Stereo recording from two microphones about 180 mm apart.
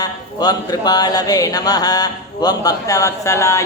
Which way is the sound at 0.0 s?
20° left (ahead or behind).